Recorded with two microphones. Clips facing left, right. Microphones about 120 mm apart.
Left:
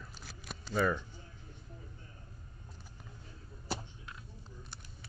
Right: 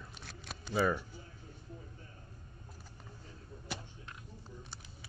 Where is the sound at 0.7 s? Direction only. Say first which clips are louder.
Even; 10° right (ahead or behind).